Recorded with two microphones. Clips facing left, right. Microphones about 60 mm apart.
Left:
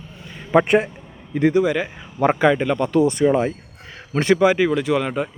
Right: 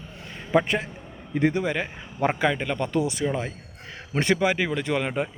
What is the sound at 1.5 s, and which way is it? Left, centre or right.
A man's voice, centre.